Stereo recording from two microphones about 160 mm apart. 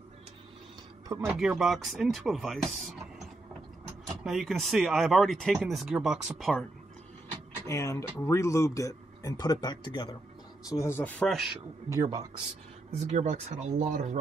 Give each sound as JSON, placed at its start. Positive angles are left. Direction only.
{"t": 1.2, "sound": "speech", "side_deg": -5}
{"t": 4.2, "sound": "speech", "side_deg": 0}
{"t": 7.6, "sound": "speech", "side_deg": 20}
{"t": 11.9, "sound": "speech", "side_deg": -20}
{"t": 12.9, "sound": "speech", "side_deg": -45}